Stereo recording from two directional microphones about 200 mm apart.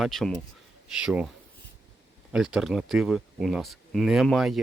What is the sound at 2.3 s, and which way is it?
Speech, centre (ahead or behind).